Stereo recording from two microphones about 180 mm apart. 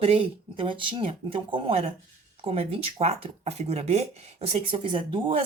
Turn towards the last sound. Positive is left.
turn(degrees=-30)  # may be behind; listen again after turning